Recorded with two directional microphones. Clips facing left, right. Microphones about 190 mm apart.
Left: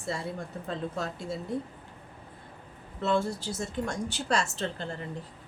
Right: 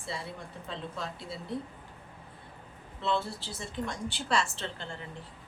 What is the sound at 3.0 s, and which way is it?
A woman's voice, 45° left (ahead or behind).